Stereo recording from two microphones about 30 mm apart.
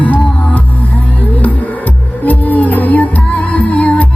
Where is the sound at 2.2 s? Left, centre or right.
Left.